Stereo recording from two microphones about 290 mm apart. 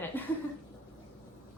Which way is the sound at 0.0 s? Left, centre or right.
Centre.